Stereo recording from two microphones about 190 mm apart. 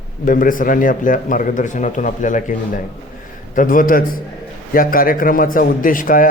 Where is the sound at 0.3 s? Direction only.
45° left (ahead or behind).